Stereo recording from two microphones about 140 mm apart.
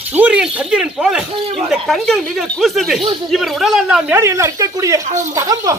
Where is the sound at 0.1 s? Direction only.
10° right (ahead or behind).